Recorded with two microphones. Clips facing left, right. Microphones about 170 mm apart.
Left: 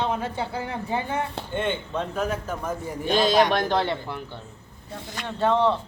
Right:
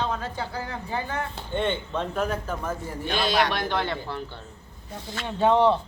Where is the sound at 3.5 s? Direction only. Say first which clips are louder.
Left 5 dB; 45° left (ahead or behind).